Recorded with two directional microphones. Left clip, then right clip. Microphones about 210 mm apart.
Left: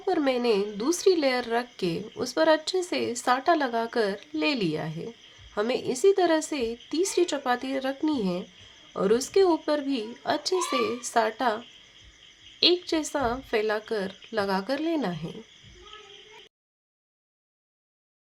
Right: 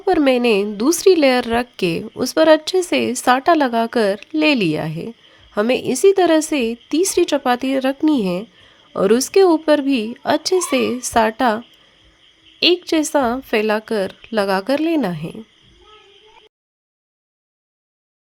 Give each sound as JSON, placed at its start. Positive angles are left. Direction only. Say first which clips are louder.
{"t": 0.0, "sound": "speech", "louder": "right 10 dB", "side_deg": -35}